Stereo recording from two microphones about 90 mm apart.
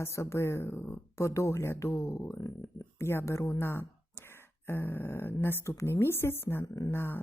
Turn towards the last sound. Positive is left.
turn(degrees=25)  # may be behind; listen again after turning